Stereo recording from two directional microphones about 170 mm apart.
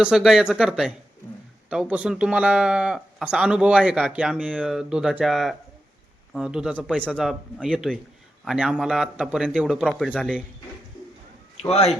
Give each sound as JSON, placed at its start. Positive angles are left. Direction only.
{"t": 0.0, "sound": "speech", "side_deg": -5}
{"t": 11.7, "sound": "speech", "side_deg": 35}